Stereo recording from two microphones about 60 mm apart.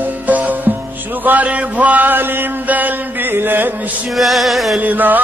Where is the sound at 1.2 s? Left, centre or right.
Right.